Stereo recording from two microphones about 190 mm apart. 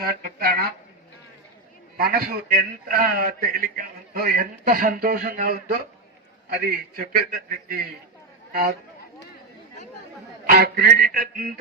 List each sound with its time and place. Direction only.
0.0 s a man's voice: 50° right (ahead or behind)
2.0 s a man's voice: 50° right (ahead or behind)
10.4 s a man's voice: 50° right (ahead or behind)